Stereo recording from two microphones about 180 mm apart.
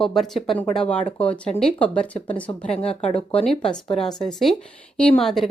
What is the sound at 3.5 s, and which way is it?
A woman's voice, 5° left (ahead or behind).